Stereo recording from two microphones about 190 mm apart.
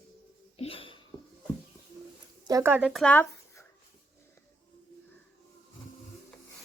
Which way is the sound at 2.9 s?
5° left (ahead or behind).